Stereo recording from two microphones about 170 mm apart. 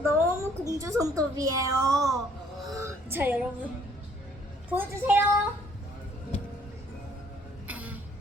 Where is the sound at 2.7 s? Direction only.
15° right (ahead or behind).